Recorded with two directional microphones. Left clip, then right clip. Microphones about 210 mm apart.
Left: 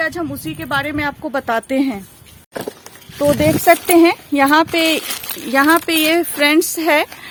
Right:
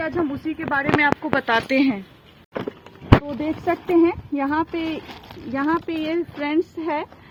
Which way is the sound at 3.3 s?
55° left (ahead or behind).